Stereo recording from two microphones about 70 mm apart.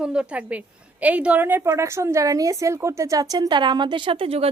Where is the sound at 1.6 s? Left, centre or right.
Right.